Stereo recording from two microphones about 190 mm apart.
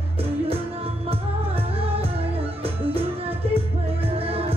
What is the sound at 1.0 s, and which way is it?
Music, 30° right (ahead or behind).